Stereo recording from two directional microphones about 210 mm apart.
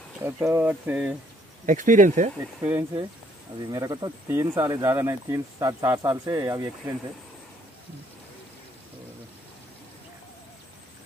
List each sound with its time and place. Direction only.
0.2 s speech: 10° right (ahead or behind)
1.7 s speech: 40° right (ahead or behind)
2.6 s speech: 10° right (ahead or behind)